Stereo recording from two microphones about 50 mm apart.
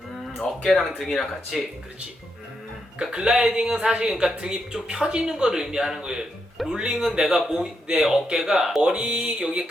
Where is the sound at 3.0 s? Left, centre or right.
Centre.